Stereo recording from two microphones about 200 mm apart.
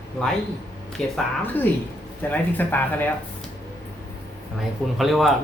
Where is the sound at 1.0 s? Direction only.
5° left (ahead or behind).